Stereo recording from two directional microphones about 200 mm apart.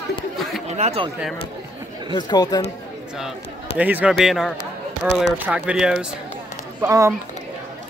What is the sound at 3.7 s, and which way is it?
Speech, 10° right (ahead or behind).